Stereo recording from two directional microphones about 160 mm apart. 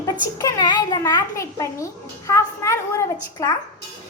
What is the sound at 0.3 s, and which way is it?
A child's voice, 20° left (ahead or behind).